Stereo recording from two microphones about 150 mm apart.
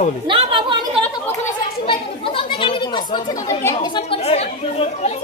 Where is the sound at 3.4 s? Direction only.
25° left (ahead or behind); by 5.2 s 45° left (ahead or behind).